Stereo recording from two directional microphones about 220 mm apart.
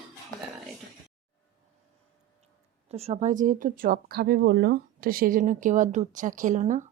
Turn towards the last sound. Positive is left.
turn(degrees=-35)  # may be behind; listen again after turning